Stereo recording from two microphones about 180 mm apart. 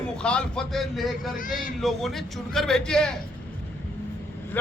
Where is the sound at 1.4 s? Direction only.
50° left (ahead or behind).